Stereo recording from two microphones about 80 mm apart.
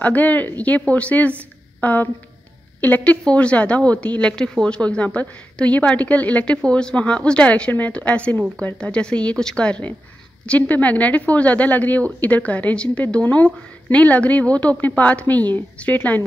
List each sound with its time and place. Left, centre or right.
0.0 s a woman's voice: centre